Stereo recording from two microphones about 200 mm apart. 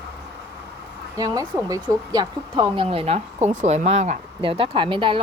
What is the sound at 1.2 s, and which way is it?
Speech, 15° right (ahead or behind).